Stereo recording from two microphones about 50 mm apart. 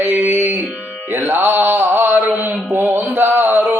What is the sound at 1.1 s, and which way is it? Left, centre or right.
Mantra, right.